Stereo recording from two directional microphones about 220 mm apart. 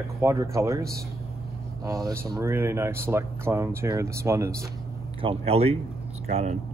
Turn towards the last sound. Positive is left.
turn(degrees=-30)  # may be behind; listen again after turning